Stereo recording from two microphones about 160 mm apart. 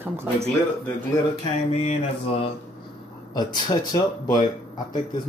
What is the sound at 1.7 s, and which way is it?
Speech, 40° left (ahead or behind).